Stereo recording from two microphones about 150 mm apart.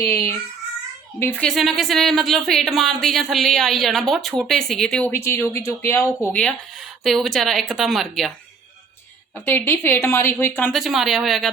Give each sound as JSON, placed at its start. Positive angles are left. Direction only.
{"t": 0.0, "sound": "a woman's voice", "side_deg": 15}
{"t": 6.4, "sound": "speech", "side_deg": 0}
{"t": 9.5, "sound": "a woman's voice", "side_deg": 15}
{"t": 10.8, "sound": "speech", "side_deg": 0}